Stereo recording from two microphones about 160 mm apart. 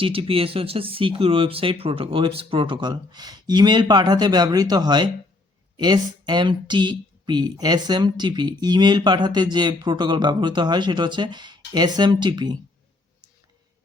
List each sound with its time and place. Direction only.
0.0 s speech: 35° right (ahead or behind)